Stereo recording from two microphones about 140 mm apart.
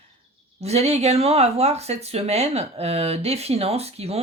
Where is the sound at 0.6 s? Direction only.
50° right (ahead or behind).